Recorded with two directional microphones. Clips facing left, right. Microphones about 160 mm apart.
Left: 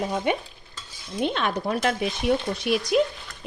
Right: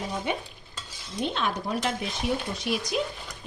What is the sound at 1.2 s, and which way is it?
Stir, 65° left (ahead or behind).